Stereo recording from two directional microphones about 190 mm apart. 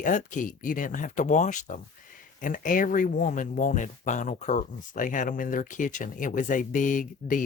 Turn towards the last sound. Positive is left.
turn(degrees=45)  # may be behind; listen again after turning